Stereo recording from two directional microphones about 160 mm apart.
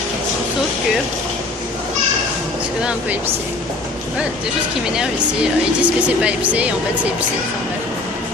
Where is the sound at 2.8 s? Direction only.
10° right (ahead or behind).